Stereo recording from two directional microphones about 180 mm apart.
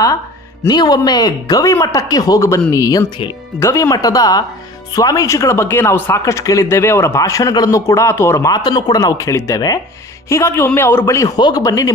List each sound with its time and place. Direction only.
0.7 s speech: 20° left (ahead or behind)